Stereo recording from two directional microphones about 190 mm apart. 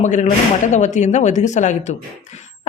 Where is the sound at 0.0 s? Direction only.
40° left (ahead or behind).